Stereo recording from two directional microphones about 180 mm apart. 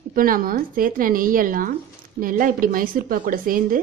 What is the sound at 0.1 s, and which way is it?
A woman's voice, 50° right (ahead or behind).